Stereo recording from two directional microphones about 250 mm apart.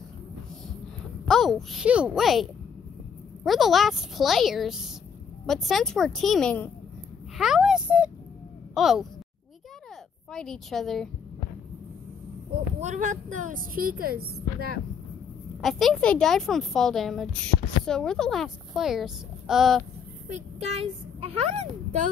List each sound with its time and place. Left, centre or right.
1.2 s a child's voice: centre
10.3 s a child's voice: centre
12.5 s speech: right
15.6 s a child's voice: centre
20.2 s a child's voice: right